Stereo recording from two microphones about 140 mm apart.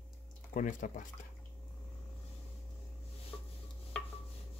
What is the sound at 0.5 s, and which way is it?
Speech, 65° left (ahead or behind).